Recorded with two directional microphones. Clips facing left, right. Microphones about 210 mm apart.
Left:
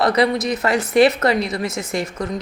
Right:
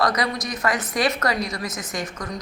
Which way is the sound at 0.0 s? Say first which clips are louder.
Left 6 dB; 30° left (ahead or behind).